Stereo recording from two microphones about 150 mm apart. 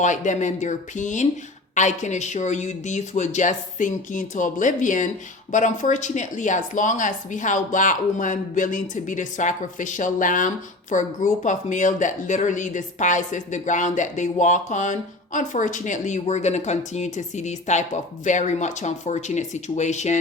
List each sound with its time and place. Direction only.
0.0 s speech: 55° left (ahead or behind)